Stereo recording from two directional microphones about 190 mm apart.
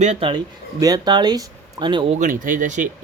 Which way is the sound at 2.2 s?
45° right (ahead or behind).